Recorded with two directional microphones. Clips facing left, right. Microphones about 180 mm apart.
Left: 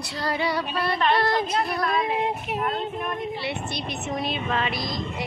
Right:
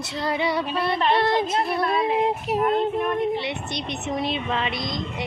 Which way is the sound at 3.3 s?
20° right (ahead or behind).